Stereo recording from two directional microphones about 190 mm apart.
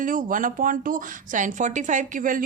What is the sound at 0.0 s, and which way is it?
Speech, 45° right (ahead or behind).